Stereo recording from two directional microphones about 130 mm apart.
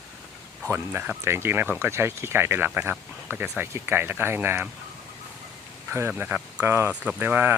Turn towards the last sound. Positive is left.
turn(degrees=-15)  # may be behind; listen again after turning